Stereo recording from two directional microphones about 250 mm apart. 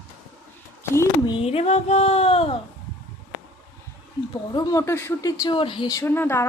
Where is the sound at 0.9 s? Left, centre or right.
Centre.